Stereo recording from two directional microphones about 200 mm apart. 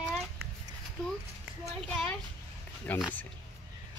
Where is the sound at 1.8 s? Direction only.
5° left (ahead or behind).